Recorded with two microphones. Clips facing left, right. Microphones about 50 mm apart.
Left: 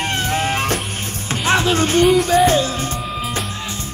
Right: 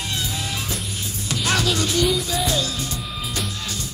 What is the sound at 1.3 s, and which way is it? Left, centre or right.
Music, left.